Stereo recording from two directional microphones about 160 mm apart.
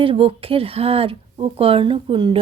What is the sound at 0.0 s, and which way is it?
Speech, 35° right (ahead or behind).